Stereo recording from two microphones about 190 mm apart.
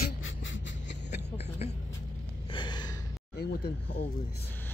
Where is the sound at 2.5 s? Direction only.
25° left (ahead or behind).